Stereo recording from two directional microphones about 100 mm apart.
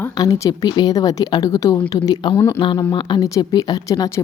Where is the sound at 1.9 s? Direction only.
45° left (ahead or behind).